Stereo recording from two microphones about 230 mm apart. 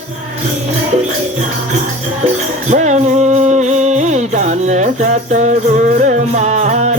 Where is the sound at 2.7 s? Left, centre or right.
Right.